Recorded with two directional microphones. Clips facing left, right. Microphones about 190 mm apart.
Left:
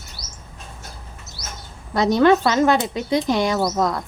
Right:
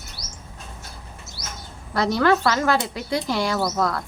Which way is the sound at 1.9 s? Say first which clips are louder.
Left 4 dB; 20° left (ahead or behind).